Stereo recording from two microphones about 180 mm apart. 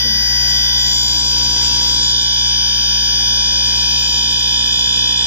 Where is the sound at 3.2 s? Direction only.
10° left (ahead or behind).